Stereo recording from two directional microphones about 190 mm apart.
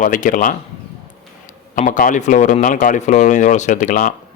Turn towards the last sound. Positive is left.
turn(degrees=40)  # may be behind; listen again after turning